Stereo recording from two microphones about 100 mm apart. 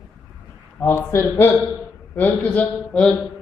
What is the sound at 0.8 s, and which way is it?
Speech, 25° left (ahead or behind).